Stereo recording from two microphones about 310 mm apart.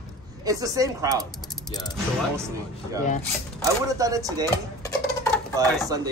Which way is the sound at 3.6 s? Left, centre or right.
Centre.